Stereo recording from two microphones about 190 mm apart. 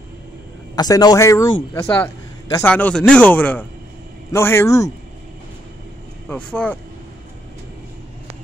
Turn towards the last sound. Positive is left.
turn(degrees=5)  # may be behind; listen again after turning